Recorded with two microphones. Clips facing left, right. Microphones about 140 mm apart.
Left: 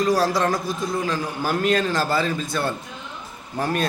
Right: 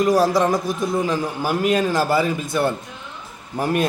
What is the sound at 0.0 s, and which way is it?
A man's voice, 20° right (ahead or behind).